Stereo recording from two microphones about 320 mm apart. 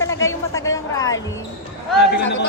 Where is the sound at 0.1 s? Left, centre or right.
Left.